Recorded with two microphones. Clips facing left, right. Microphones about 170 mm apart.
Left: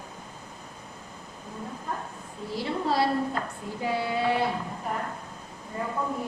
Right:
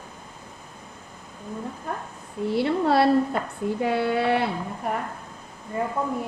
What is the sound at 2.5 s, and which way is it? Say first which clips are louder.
A woman's voice: right 7 dB; 65° right (ahead or behind).